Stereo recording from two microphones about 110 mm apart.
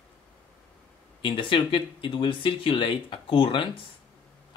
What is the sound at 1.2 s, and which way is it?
Speech, 50° left (ahead or behind).